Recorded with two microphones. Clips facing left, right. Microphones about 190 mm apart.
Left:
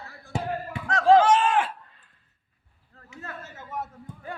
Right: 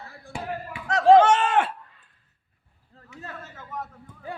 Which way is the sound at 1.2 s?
65° right (ahead or behind).